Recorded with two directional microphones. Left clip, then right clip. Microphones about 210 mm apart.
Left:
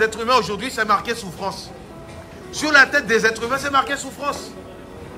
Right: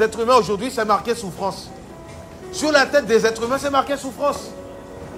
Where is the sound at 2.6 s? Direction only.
20° right (ahead or behind).